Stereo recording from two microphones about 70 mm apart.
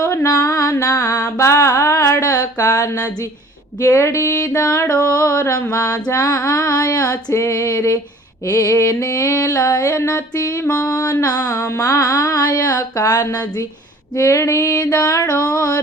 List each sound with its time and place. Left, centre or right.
0.0 s music: left
0.3 s mantra: left
2.2 s a sound: left
3.8 s mantra: left
5.7 s music: left
7.4 s mantra: left
9.9 s a sound: left
10.7 s music: left
14.2 s mantra: left